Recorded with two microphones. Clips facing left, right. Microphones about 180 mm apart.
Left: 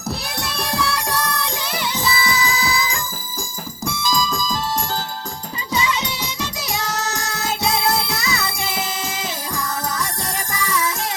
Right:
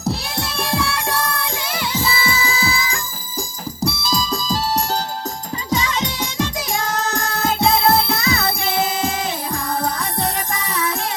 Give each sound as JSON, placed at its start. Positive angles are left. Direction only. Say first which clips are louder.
{"t": 0.0, "sound": "music", "louder": "right 3 dB", "side_deg": -30}
{"t": 3.8, "sound": "music", "louder": "even", "side_deg": -35}
{"t": 5.7, "sound": "music", "louder": "right 1 dB", "side_deg": -50}